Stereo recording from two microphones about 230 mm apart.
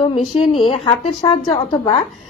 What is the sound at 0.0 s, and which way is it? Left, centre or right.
A woman's voice, left.